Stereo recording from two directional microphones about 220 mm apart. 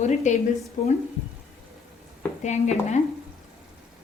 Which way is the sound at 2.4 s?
30° left (ahead or behind).